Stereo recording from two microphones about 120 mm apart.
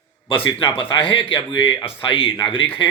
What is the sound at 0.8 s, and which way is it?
Speech, 45° left (ahead or behind).